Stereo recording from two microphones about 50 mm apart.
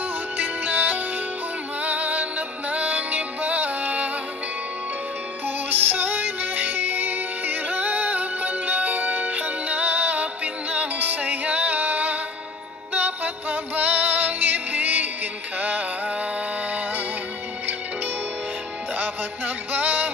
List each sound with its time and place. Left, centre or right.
0.4 s music: right
5.7 s music: right
18.9 s music: right